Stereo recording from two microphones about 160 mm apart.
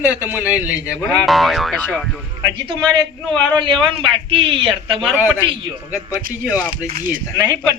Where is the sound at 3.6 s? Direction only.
30° right (ahead or behind).